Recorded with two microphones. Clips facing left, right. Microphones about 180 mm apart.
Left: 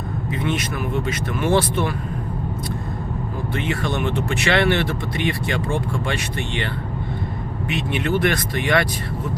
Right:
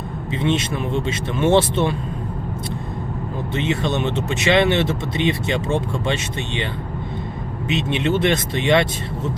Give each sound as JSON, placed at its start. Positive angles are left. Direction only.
{"t": 0.3, "sound": "speech", "side_deg": -25}
{"t": 3.5, "sound": "speech", "side_deg": -20}
{"t": 7.7, "sound": "speech", "side_deg": -25}